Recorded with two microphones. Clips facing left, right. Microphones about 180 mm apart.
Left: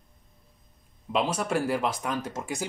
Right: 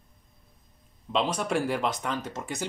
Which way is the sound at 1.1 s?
5° left (ahead or behind).